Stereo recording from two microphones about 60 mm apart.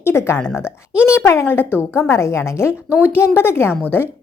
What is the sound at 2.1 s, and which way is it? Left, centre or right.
Speech, left.